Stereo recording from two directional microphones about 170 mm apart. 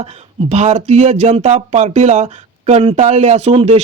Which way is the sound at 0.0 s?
40° right (ahead or behind).